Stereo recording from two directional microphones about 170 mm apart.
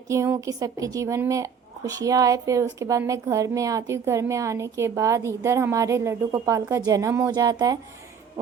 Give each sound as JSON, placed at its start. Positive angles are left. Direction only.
{"t": 0.1, "sound": "a woman's voice", "side_deg": -15}